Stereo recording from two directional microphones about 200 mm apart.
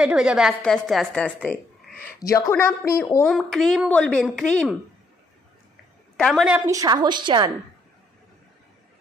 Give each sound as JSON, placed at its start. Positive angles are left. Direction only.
{"t": 0.0, "sound": "a woman's voice", "side_deg": -5}
{"t": 6.1, "sound": "a woman's voice", "side_deg": 0}